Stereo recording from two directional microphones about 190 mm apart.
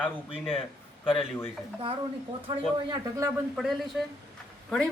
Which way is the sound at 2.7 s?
20° right (ahead or behind).